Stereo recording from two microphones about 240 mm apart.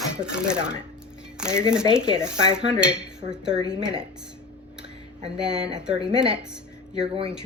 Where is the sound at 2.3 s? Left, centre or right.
Right.